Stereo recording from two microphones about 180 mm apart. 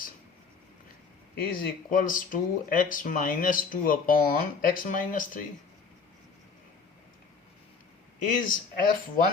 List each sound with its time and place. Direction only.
1.5 s speech: 50° left (ahead or behind)
8.3 s speech: 50° left (ahead or behind)